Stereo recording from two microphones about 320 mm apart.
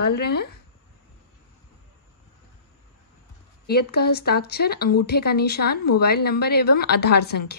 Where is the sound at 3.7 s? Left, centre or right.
Left.